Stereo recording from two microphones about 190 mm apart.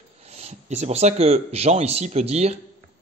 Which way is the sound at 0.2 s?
35° right (ahead or behind).